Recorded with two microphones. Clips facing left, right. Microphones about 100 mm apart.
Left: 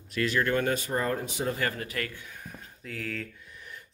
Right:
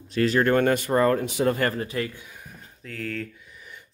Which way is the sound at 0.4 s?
55° right (ahead or behind).